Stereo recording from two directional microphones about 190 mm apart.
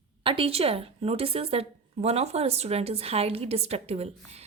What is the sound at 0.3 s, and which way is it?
A woman's voice, 30° right (ahead or behind).